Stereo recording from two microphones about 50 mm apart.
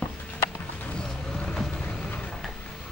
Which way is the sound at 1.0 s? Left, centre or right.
Left.